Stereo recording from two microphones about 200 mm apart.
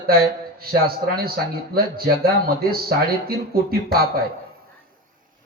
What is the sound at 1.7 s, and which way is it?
Speech, 50° right (ahead or behind).